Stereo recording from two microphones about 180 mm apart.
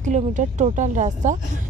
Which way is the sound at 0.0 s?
45° right (ahead or behind).